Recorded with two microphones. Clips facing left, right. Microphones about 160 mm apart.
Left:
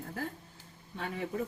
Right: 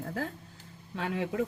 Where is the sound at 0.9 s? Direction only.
90° right.